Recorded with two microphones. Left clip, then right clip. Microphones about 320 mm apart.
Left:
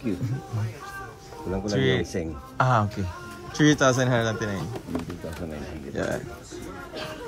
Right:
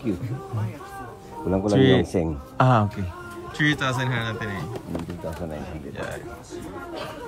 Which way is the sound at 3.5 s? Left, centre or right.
Centre.